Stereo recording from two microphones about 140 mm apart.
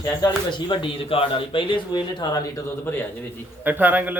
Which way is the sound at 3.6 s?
15° right (ahead or behind).